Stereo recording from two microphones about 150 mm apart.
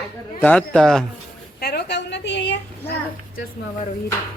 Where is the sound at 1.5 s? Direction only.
90° left.